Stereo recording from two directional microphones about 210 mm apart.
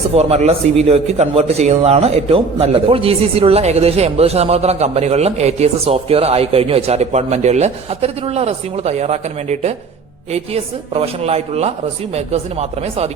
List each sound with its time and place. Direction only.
0.1 s a man's voice: 30° right (ahead or behind)